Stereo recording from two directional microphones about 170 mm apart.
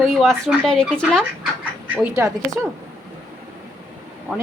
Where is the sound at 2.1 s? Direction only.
20° right (ahead or behind).